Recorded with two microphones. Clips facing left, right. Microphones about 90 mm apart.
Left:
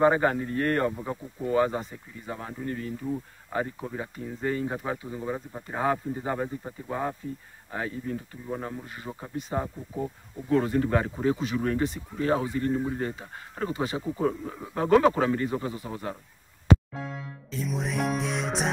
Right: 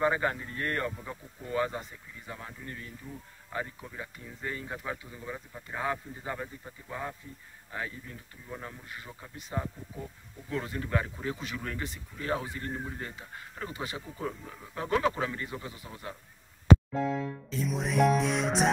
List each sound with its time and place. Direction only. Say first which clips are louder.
0.0 s speech: left 6 dB; 35° left (ahead or behind)
3.5 s speech: left 7 dB; 30° left (ahead or behind)
14.6 s speech: left 8 dB; 40° left (ahead or behind)
17.5 s music: left 3 dB; centre (ahead or behind)